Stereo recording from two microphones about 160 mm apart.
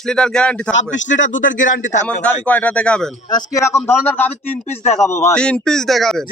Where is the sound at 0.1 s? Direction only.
5° left (ahead or behind).